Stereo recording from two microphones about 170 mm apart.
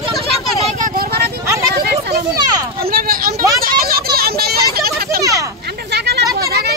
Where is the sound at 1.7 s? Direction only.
65° right (ahead or behind).